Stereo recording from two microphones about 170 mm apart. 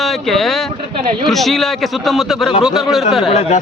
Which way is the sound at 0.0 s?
Centre (ahead or behind).